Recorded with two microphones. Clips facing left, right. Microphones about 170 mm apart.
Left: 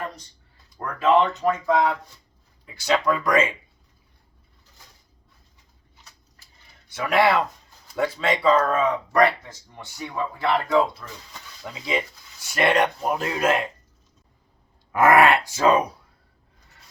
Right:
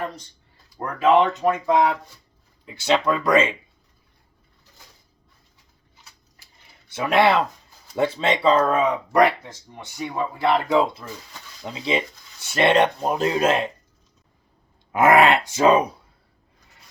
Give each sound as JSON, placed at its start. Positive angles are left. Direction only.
{"t": 0.8, "sound": "speech", "side_deg": -15}
{"t": 6.9, "sound": "speech", "side_deg": -25}
{"t": 11.6, "sound": "speech", "side_deg": -25}
{"t": 14.9, "sound": "speech", "side_deg": -20}